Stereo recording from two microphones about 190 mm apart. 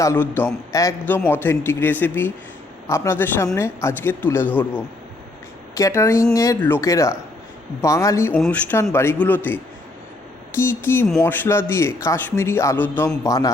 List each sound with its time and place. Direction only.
0.0 s a man's voice: 10° left (ahead or behind)
10.6 s a man's voice: 10° left (ahead or behind)